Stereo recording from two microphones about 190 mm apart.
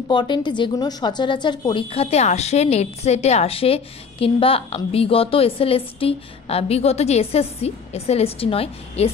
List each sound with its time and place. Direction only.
0.1 s a woman's voice: 25° left (ahead or behind)